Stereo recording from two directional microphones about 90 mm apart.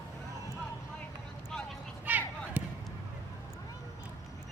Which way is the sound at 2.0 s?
20° right (ahead or behind).